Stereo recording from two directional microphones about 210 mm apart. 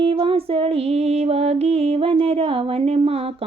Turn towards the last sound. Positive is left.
turn(degrees=-30)  # may be behind; listen again after turning